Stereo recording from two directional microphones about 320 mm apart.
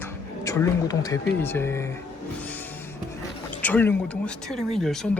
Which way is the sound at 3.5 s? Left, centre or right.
Centre.